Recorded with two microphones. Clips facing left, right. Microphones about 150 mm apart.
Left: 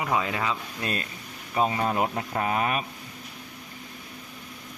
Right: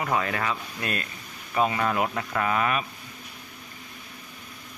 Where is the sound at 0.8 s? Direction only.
30° left (ahead or behind).